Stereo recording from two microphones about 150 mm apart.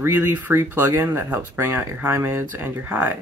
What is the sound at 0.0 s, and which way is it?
Speech, 15° right (ahead or behind).